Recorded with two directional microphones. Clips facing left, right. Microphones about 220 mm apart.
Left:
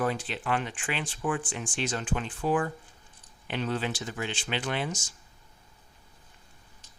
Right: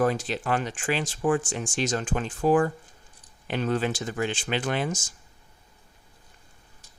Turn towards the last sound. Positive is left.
turn(degrees=-50)  # may be behind; listen again after turning